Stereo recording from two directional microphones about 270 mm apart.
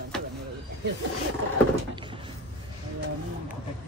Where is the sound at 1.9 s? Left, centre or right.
Centre.